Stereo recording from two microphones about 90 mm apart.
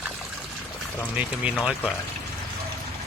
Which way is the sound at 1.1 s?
15° right (ahead or behind).